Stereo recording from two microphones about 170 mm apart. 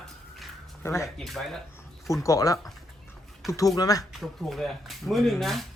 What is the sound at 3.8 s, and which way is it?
Speech, 20° left (ahead or behind).